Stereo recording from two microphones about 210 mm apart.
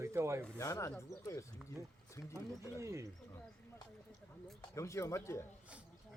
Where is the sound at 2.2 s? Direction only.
15° left (ahead or behind).